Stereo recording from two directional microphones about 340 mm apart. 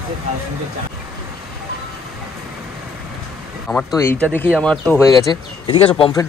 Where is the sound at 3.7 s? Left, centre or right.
Centre.